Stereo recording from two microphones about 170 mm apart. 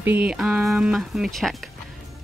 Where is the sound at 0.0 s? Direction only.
10° right (ahead or behind).